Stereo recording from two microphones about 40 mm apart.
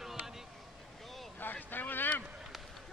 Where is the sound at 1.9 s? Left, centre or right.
Left.